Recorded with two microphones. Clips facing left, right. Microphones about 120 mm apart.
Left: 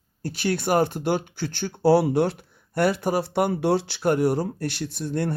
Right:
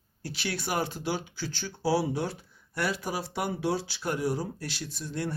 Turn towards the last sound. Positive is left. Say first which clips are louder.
# left 7 dB
turn(degrees=60)  # may be behind; listen again after turning